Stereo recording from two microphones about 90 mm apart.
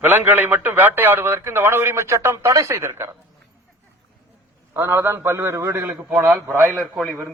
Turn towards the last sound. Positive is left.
turn(degrees=0)  # may be behind; listen again after turning